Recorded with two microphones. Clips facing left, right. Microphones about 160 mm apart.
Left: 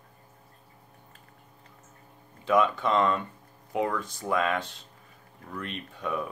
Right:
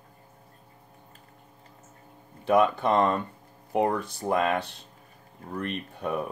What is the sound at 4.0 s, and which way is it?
Speech, 55° right (ahead or behind).